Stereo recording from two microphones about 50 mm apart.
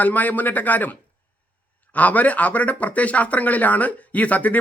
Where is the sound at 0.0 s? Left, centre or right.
Left.